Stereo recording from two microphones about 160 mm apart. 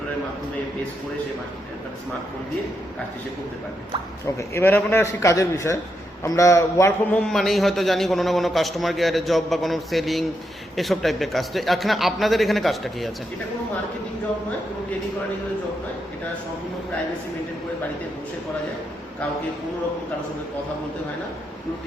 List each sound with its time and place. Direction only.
4.4 s a man's voice: 15° left (ahead or behind)